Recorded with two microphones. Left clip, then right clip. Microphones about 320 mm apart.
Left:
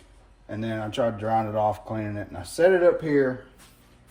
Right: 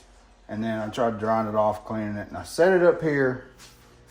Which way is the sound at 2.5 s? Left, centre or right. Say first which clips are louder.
Even; centre.